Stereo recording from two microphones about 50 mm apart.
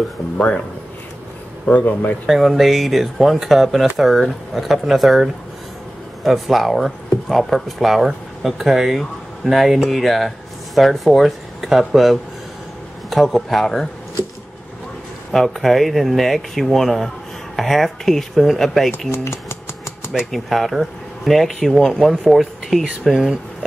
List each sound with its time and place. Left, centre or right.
1.7 s a man's voice: left
2.2 s speech: centre
15.3 s speech: centre
19.1 s speech: left
20.2 s speech: centre